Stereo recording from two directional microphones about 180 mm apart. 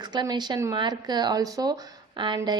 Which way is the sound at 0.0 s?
25° right (ahead or behind).